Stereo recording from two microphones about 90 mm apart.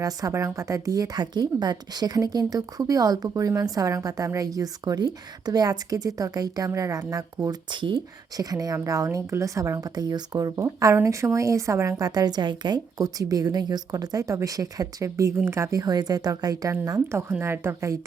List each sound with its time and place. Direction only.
0.0 s a woman's voice: 40° right (ahead or behind)
7.7 s speech: 60° right (ahead or behind)
8.4 s a woman's voice: 45° right (ahead or behind)
17.1 s a woman's voice: 30° right (ahead or behind)